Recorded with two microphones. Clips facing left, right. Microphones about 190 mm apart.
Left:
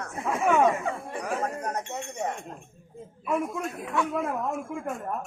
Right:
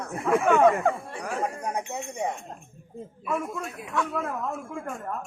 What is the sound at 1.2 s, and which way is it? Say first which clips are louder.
Speech: right 1 dB; centre (ahead or behind).